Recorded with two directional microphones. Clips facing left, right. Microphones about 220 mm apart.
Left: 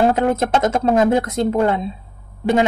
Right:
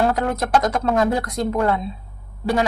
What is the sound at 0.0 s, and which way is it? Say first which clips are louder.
A woman's voice: left 4 dB; 25° left (ahead or behind).